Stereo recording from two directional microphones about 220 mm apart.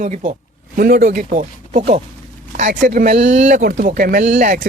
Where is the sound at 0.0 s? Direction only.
35° right (ahead or behind).